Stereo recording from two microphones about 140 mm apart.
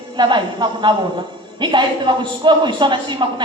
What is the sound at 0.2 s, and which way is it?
A woman's voice, 35° right (ahead or behind).